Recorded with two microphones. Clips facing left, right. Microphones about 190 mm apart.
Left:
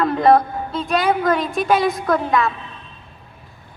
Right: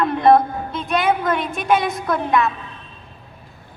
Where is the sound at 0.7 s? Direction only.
35° left (ahead or behind).